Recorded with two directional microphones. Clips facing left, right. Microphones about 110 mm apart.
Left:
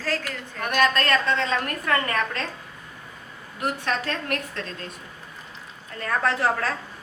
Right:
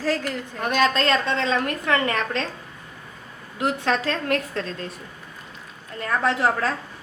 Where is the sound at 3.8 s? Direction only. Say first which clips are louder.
Right 5 dB; 90° right.